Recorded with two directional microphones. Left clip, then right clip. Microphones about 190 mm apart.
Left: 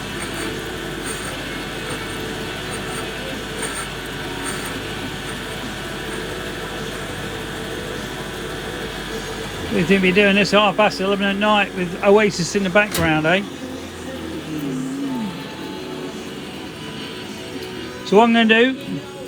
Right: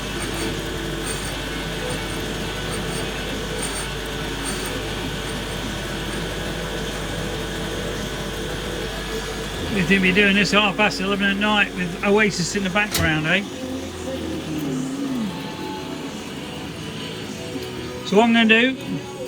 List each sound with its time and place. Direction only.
9.9 s speech: 20° left (ahead or behind)
12.7 s speech: 30° left (ahead or behind)
18.2 s speech: 15° left (ahead or behind)